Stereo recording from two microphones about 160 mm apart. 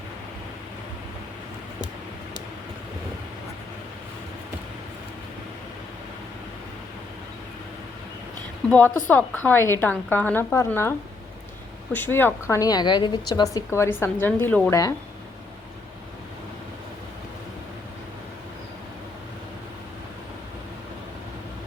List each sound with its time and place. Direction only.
8.7 s a woman's voice: 10° left (ahead or behind)